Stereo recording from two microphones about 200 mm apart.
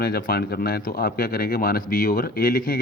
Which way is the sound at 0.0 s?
50° left (ahead or behind).